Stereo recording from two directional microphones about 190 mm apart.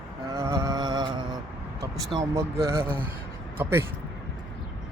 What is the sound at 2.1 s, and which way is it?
Mantra, 15° right (ahead or behind).